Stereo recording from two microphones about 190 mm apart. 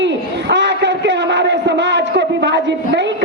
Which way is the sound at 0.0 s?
65° right (ahead or behind).